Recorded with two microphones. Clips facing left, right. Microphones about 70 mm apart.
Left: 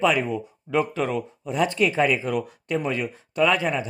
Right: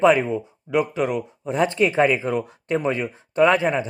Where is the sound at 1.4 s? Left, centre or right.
Right.